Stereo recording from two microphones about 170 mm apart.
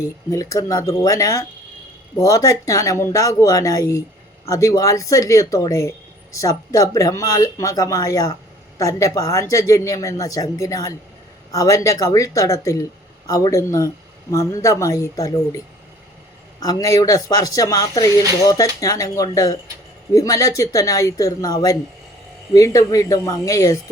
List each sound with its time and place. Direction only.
0.3 s speech: 20° left (ahead or behind)
16.6 s speech: 20° left (ahead or behind)